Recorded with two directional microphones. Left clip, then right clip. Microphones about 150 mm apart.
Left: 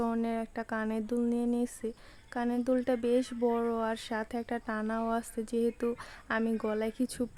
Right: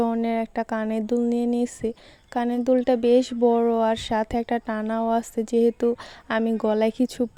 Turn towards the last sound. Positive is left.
turn(degrees=-35)  # may be behind; listen again after turning